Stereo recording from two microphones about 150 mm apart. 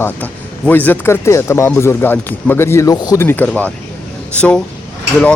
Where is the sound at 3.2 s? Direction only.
10° left (ahead or behind).